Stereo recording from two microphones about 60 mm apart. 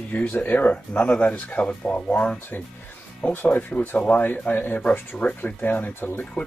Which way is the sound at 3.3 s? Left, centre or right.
Left.